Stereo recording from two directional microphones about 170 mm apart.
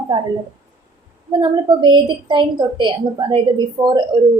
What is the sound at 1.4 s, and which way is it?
A woman's voice, 25° right (ahead or behind).